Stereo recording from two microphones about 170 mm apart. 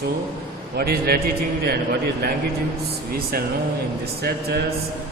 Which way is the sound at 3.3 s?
60° right (ahead or behind).